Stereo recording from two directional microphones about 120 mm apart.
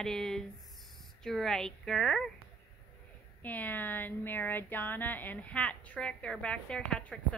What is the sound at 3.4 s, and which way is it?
Speech, 15° left (ahead or behind).